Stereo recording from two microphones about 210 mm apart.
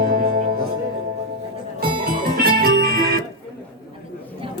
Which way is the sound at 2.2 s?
45° right (ahead or behind).